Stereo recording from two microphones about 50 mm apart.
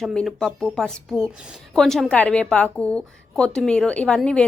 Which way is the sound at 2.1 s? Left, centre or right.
Left.